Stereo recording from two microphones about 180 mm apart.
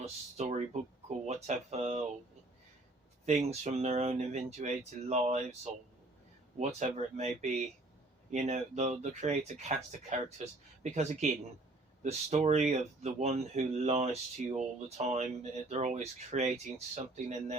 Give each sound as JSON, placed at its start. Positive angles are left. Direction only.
{"t": 0.0, "sound": "a sound", "side_deg": -40}
{"t": 1.2, "sound": "speech", "side_deg": -40}
{"t": 3.2, "sound": "speech", "side_deg": -40}
{"t": 6.6, "sound": "speech", "side_deg": -40}